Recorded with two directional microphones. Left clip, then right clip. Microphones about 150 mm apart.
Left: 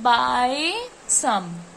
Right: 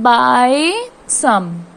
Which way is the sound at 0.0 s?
40° right (ahead or behind).